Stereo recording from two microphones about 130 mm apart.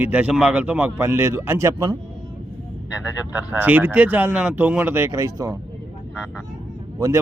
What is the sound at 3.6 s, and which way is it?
A man's voice, 10° right (ahead or behind).